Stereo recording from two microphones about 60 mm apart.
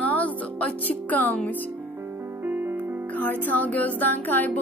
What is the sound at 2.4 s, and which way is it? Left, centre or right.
Music, right.